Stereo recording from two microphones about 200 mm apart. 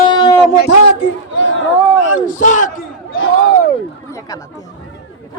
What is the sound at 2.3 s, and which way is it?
Speech, 40° left (ahead or behind).